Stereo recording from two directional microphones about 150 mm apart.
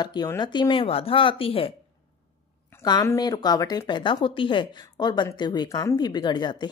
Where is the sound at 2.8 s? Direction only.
25° left (ahead or behind).